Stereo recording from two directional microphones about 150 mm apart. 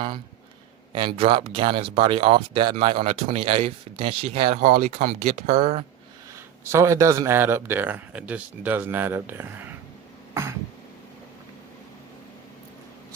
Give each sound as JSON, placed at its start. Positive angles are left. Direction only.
{"t": 0.9, "sound": "speech", "side_deg": -35}
{"t": 4.6, "sound": "speech", "side_deg": -55}
{"t": 6.7, "sound": "a man's voice", "side_deg": -20}